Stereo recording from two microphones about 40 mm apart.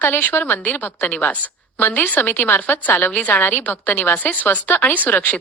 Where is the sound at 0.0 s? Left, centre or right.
Left.